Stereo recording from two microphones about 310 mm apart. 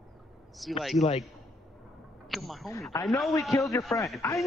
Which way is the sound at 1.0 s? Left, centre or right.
Left.